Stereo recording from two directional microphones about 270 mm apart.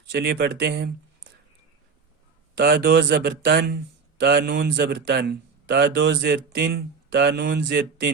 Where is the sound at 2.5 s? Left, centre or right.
Right.